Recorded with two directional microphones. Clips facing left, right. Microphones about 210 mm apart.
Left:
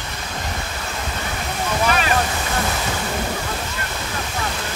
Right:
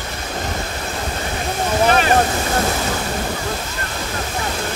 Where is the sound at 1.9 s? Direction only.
35° right (ahead or behind).